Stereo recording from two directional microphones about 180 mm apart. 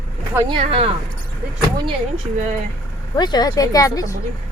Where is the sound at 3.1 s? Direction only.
25° left (ahead or behind).